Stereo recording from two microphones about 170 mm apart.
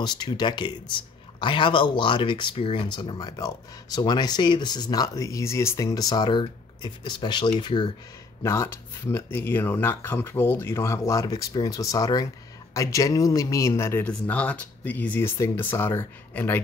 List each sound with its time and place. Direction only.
0.0 s speech: 25° left (ahead or behind)
8.4 s speech: 15° left (ahead or behind)